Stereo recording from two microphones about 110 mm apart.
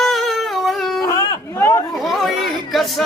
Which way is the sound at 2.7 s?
Centre (ahead or behind).